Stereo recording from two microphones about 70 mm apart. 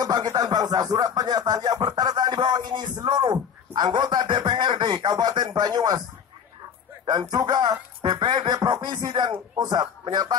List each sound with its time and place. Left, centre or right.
0.0 s speech: right
7.1 s speech: right
9.7 s speech: right